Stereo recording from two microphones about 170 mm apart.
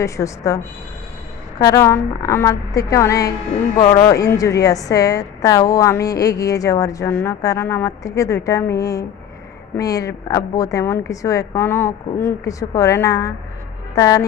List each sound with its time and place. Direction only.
0.0 s a woman's voice: 20° left (ahead or behind)